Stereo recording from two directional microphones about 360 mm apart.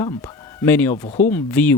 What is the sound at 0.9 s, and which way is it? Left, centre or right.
Speech, centre.